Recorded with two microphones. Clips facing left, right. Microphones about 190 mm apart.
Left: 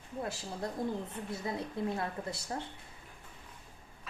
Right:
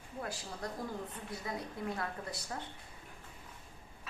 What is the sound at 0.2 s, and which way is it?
A woman's voice, 25° left (ahead or behind).